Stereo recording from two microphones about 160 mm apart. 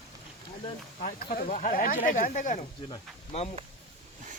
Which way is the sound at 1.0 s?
60° left (ahead or behind).